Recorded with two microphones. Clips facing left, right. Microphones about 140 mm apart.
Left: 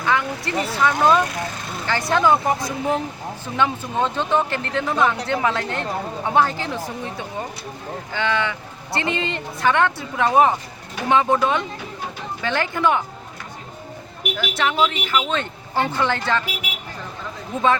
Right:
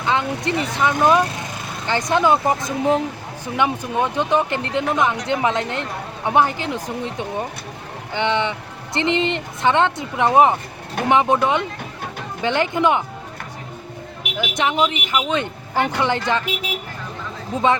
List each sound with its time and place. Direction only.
0.0 s a woman's voice: 20° right (ahead or behind)
14.3 s speech: 20° right (ahead or behind)